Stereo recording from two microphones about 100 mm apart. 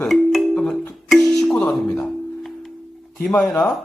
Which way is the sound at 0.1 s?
Centre (ahead or behind).